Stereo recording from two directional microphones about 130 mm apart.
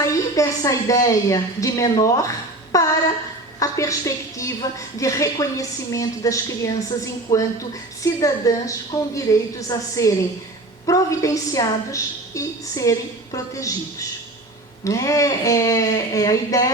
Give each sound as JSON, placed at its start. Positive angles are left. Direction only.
{"t": 0.0, "sound": "a woman's voice", "side_deg": 25}
{"t": 14.8, "sound": "a woman's voice", "side_deg": 25}